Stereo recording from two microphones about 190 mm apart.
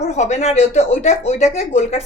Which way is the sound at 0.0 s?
35° left (ahead or behind).